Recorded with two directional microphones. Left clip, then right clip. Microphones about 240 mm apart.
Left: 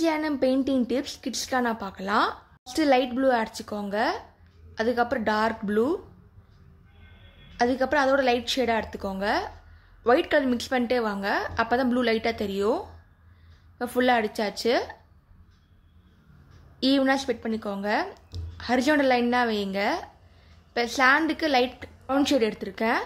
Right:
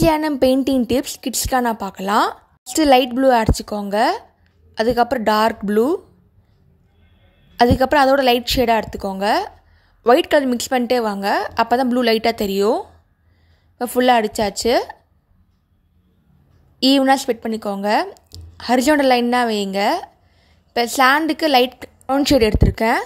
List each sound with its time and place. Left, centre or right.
0.0 s a woman's voice: right
7.5 s a woman's voice: right
16.8 s speech: right